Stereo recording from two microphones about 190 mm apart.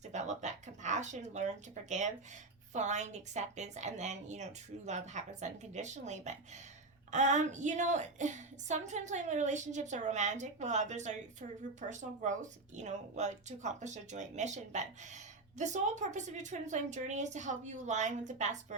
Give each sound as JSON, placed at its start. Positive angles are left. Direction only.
{"t": 0.1, "sound": "a woman's voice", "side_deg": -40}